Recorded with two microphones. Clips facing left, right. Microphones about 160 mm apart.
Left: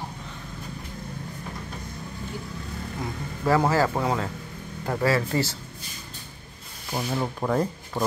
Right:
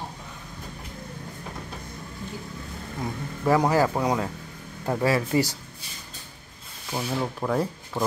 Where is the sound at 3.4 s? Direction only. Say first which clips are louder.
Right 1 dB; 15° right (ahead or behind).